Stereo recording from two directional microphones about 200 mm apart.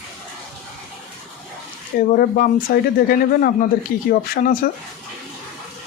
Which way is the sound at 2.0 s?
45° left (ahead or behind).